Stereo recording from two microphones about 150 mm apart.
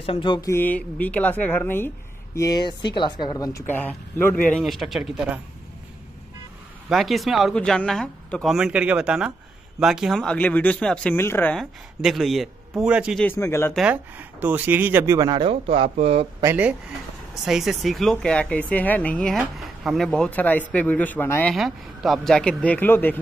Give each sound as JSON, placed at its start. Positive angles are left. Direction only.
{"t": 0.0, "sound": "speech", "side_deg": 35}
{"t": 0.5, "sound": "speech", "side_deg": 10}
{"t": 2.3, "sound": "speech", "side_deg": 25}
{"t": 6.9, "sound": "speech", "side_deg": 0}
{"t": 11.5, "sound": "speech", "side_deg": 0}
{"t": 13.2, "sound": "speech", "side_deg": 15}
{"t": 13.7, "sound": "speech", "side_deg": -10}
{"t": 15.1, "sound": "speech", "side_deg": -30}
{"t": 16.4, "sound": "speech", "side_deg": -10}
{"t": 21.5, "sound": "speech", "side_deg": 0}